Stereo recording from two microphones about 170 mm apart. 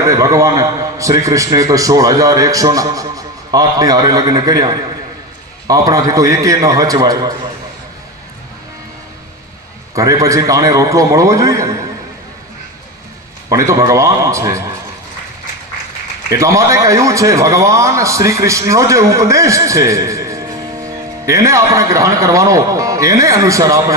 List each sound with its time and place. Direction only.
0.0 s a man's voice: 20° right (ahead or behind)
9.9 s a man's voice: 20° right (ahead or behind)
13.5 s a man's voice: 15° right (ahead or behind)
16.3 s a man's voice: 15° right (ahead or behind)